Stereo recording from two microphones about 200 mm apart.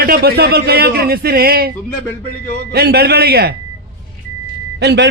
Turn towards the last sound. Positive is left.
turn(degrees=-60)  # may be behind; listen again after turning